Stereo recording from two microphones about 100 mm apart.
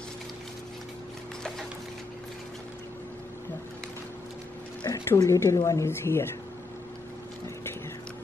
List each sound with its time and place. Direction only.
4.9 s speech: 30° left (ahead or behind)